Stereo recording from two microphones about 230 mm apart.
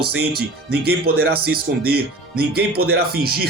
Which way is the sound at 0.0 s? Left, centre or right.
Right.